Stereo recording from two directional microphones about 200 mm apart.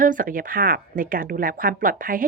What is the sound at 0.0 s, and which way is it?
A woman's voice, 45° right (ahead or behind).